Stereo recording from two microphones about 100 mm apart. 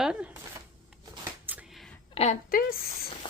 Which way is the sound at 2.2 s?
65° left (ahead or behind).